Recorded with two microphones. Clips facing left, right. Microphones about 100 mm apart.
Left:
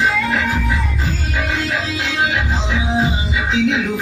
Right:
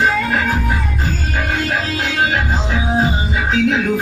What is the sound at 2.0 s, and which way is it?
Music, 50° right (ahead or behind).